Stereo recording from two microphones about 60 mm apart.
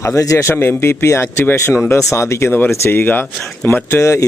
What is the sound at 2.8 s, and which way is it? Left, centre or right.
Speech, left.